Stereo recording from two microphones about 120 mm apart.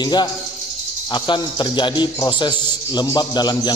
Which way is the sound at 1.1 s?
40° left (ahead or behind).